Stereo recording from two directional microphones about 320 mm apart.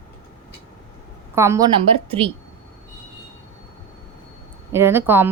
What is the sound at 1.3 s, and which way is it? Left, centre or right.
A woman's voice, centre.